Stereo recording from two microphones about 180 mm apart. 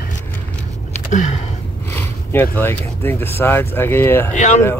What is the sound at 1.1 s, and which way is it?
Sniff, 40° left (ahead or behind).